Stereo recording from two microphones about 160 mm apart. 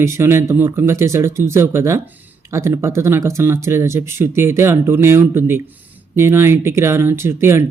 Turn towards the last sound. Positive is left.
turn(degrees=-15)  # may be behind; listen again after turning